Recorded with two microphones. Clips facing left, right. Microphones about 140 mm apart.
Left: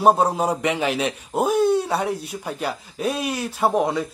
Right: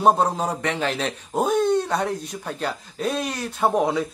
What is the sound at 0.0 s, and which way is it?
A man's voice, 10° left (ahead or behind).